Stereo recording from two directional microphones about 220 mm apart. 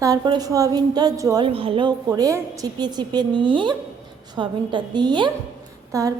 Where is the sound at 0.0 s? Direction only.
15° right (ahead or behind).